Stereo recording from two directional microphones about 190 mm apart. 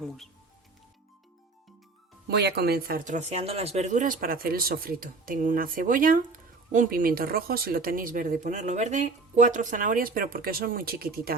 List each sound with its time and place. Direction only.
2.2 s speech: 60° right (ahead or behind)